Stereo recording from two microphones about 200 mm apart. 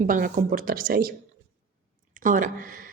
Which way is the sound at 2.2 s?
40° right (ahead or behind).